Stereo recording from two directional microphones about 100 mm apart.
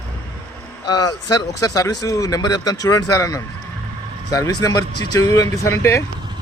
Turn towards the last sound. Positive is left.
turn(degrees=25)  # may be behind; listen again after turning